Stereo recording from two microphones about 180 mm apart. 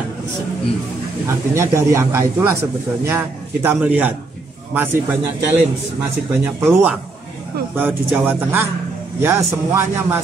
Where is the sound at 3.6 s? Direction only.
10° right (ahead or behind).